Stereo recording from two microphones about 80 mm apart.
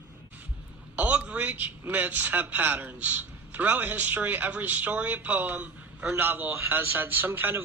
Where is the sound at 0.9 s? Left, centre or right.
Centre.